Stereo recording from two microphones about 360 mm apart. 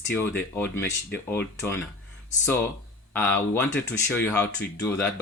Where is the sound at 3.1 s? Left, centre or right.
Centre.